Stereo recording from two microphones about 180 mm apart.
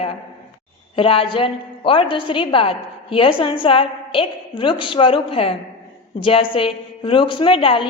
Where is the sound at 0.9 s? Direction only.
30° left (ahead or behind).